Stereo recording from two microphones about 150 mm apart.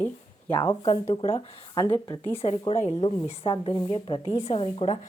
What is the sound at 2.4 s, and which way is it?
Speech, 40° left (ahead or behind).